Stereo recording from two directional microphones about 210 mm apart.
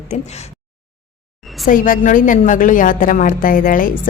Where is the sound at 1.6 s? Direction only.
40° left (ahead or behind).